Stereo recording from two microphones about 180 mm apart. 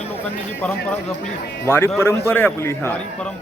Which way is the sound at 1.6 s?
15° left (ahead or behind).